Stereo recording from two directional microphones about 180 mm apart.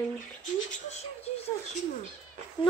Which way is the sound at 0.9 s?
35° left (ahead or behind).